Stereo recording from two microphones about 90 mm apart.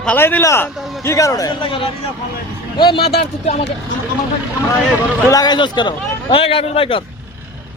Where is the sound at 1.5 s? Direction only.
70° left (ahead or behind).